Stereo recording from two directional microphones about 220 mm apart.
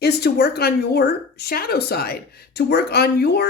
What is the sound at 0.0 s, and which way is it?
Speech, 45° left (ahead or behind).